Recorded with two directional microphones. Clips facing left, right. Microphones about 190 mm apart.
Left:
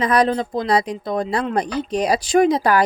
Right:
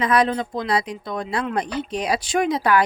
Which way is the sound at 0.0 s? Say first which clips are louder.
Left 2 dB; 40° left (ahead or behind).